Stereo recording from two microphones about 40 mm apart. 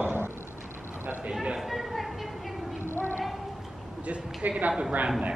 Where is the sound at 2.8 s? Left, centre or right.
Left.